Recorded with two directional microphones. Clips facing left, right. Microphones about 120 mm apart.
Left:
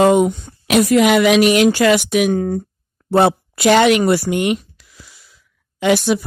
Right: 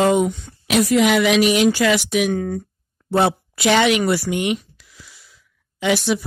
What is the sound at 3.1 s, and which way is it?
A woman's voice, 55° left (ahead or behind).